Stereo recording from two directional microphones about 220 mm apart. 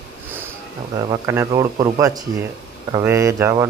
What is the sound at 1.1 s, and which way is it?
Speech, 10° right (ahead or behind).